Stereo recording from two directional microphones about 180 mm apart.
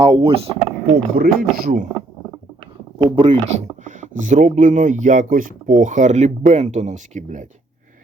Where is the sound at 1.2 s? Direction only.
55° right (ahead or behind).